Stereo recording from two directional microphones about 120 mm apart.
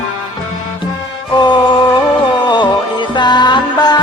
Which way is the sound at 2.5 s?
40° left (ahead or behind).